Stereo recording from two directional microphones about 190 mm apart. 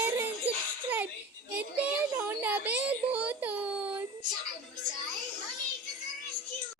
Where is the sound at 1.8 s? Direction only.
10° right (ahead or behind).